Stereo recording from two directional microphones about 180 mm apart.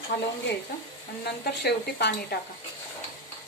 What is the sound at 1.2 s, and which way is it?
Speech, 65° left (ahead or behind).